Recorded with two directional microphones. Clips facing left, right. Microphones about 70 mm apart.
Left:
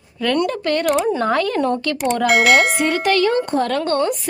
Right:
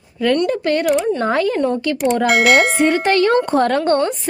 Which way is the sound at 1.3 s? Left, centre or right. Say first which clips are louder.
Right 1 dB; centre.